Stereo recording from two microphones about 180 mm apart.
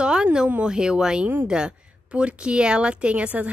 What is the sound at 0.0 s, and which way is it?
A woman's voice, 5° right (ahead or behind).